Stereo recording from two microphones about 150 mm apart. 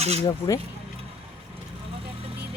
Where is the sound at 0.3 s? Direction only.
25° left (ahead or behind).